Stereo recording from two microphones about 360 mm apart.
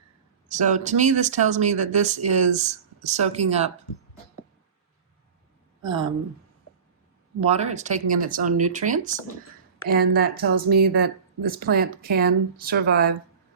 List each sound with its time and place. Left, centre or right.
0.4 s speech: centre
7.4 s a woman's voice: centre